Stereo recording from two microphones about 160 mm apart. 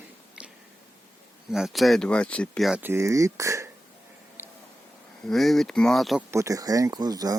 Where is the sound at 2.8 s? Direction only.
15° right (ahead or behind).